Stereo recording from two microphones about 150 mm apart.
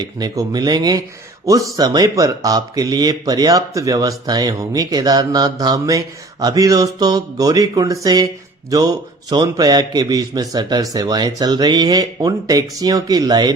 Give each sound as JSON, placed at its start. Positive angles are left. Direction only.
{"t": 0.0, "sound": "speech", "side_deg": -25}